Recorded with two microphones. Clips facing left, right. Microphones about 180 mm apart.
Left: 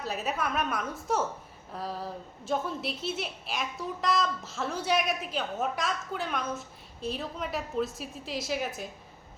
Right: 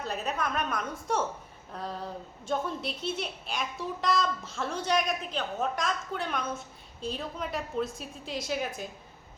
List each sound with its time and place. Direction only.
0.0 s a woman's voice: 5° left (ahead or behind)